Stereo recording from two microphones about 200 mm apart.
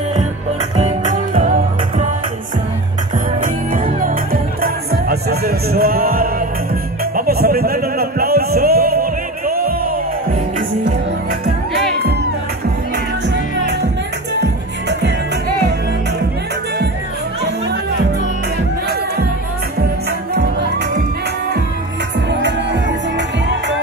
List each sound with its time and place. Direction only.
0.7 s music: 35° right (ahead or behind)
3.3 s music: 45° right (ahead or behind)
14.9 s music: 55° right (ahead or behind)
22.3 s music: 60° right (ahead or behind)